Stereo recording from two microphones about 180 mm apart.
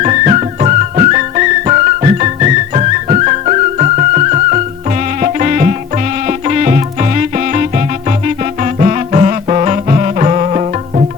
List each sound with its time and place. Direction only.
0.0 s music: 40° right (ahead or behind)